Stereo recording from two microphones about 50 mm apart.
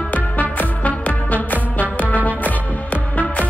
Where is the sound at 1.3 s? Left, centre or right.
Right.